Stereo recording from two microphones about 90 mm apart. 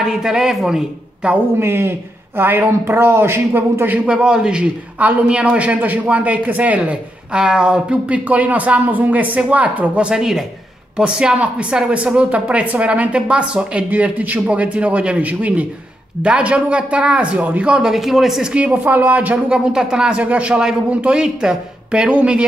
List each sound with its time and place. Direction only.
0.0 s a man's voice: 5° right (ahead or behind)
1.6 s speech: 25° right (ahead or behind)
4.0 s a man's voice: 10° right (ahead or behind)